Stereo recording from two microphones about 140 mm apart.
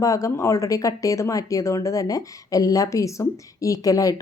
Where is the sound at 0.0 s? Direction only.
25° left (ahead or behind).